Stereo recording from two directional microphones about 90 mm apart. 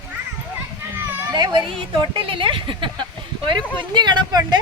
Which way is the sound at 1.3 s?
50° right (ahead or behind).